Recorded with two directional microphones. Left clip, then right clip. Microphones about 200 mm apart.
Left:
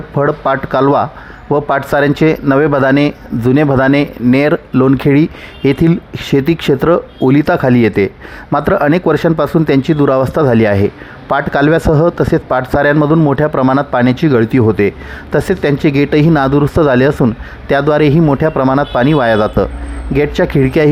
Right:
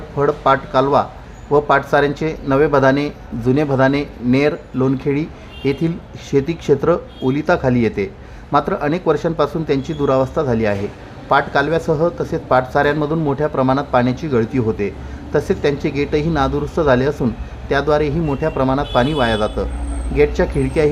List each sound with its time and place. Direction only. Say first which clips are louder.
0.2 s a man's voice: left 2 dB; 40° left (ahead or behind)